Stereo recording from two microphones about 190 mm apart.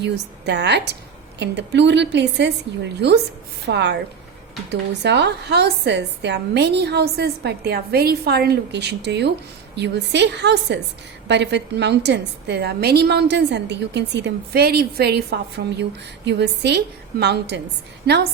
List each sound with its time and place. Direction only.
0.0 s a woman's voice: 65° right (ahead or behind)